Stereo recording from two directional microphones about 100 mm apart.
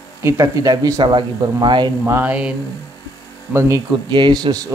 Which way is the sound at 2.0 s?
25° right (ahead or behind).